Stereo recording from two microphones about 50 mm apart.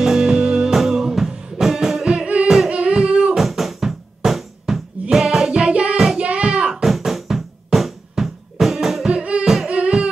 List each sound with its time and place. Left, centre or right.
0.0 s music: centre
2.2 s singing: right
2.7 s a sound: centre
3.1 s beatboxing: centre
3.3 s music: centre
9.4 s music: centre